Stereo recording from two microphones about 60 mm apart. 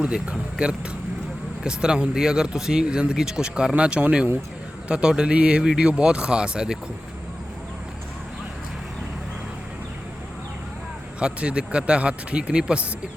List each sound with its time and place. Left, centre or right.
0.0 s speech: centre
11.2 s speech: centre